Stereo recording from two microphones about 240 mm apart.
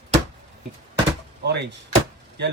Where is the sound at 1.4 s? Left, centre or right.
Right.